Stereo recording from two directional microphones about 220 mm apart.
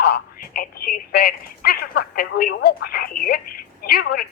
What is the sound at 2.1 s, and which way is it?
Speech, 45° left (ahead or behind).